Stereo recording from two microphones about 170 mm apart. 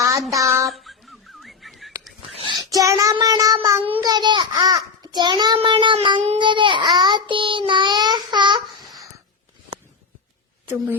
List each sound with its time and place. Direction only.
0.0 s child singing: 20° right (ahead or behind)
0.7 s a sound: centre (ahead or behind)
2.4 s a child's voice: 25° right (ahead or behind)